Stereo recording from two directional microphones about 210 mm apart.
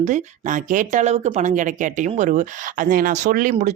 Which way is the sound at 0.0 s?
35° right (ahead or behind).